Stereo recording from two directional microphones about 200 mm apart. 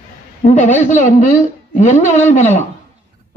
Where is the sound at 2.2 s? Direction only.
35° left (ahead or behind).